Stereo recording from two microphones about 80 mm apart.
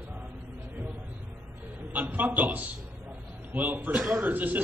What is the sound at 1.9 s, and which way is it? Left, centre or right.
A man's voice, right.